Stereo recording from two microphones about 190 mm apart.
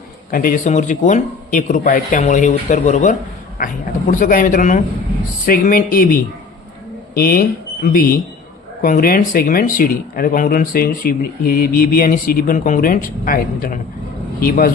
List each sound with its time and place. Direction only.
0.3 s speech: 50° left (ahead or behind)
7.2 s speech: 50° left (ahead or behind)